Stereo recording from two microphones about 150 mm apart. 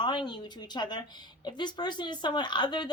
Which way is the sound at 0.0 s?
30° left (ahead or behind).